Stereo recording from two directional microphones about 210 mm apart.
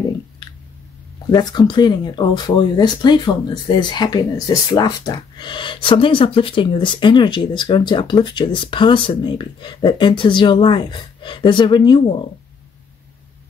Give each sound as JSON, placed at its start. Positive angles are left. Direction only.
{"t": 1.3, "sound": "speech", "side_deg": 20}